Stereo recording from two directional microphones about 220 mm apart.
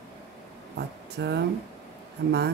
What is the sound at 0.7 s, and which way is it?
Speech, 50° right (ahead or behind).